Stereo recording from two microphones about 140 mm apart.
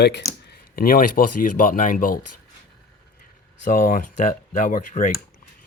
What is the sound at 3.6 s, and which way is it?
Speech, 70° left (ahead or behind).